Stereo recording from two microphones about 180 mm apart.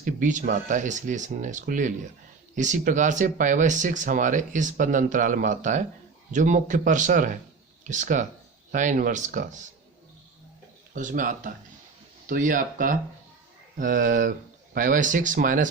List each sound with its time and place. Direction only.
0.0 s speech: 45° right (ahead or behind)
10.9 s speech: 45° right (ahead or behind)